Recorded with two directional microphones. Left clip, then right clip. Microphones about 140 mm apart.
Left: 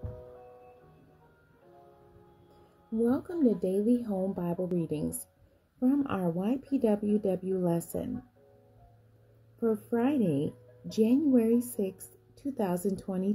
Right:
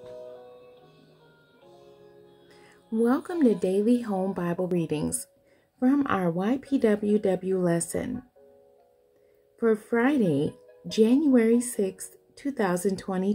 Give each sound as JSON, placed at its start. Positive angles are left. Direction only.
{"t": 3.0, "sound": "speech", "side_deg": -5}
{"t": 6.0, "sound": "speech", "side_deg": 0}
{"t": 9.6, "sound": "speech", "side_deg": 0}